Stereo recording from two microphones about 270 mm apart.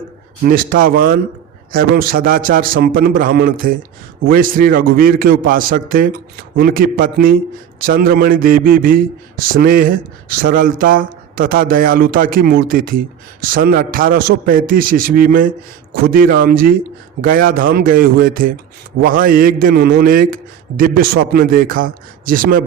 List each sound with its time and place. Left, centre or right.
0.4 s a man's voice: right